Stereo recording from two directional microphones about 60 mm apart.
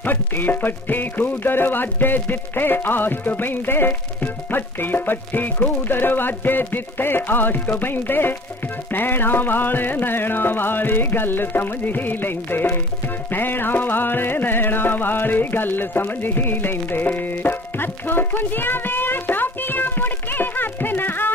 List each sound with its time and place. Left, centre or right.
0.0 s music: left